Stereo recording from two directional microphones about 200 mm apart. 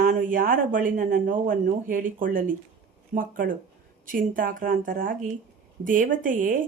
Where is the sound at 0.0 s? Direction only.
45° right (ahead or behind).